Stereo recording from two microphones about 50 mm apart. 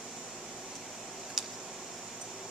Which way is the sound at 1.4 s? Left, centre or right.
Centre.